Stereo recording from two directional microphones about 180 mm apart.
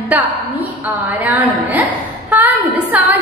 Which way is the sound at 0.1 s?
10° right (ahead or behind).